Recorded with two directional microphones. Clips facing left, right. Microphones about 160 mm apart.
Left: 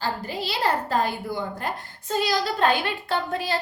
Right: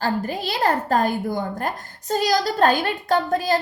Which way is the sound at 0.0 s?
50° right (ahead or behind).